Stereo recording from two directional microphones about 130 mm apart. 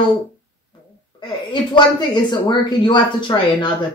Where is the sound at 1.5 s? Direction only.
35° left (ahead or behind).